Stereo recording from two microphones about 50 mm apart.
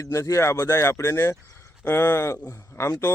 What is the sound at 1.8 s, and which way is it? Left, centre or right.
Speech, left.